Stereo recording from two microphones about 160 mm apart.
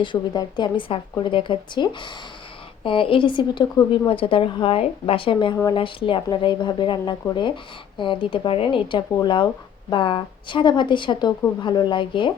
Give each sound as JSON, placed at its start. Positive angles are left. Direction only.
{"t": 0.0, "sound": "speech", "side_deg": 30}